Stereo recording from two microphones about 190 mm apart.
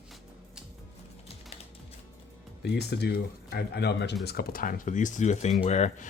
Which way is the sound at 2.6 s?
60° left (ahead or behind).